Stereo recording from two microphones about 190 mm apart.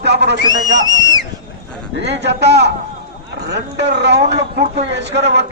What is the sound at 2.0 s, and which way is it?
Speech, 65° right (ahead or behind).